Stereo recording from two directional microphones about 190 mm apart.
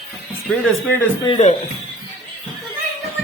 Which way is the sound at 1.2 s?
30° left (ahead or behind).